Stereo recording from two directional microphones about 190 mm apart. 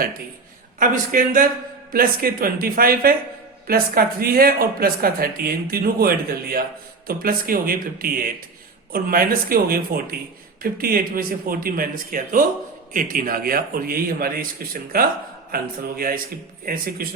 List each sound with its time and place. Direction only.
0.8 s speech: 45° right (ahead or behind)